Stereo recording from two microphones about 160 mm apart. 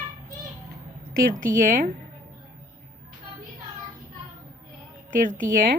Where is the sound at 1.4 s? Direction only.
55° right (ahead or behind).